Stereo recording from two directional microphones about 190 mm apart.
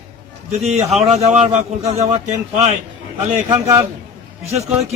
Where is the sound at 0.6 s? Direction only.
35° right (ahead or behind).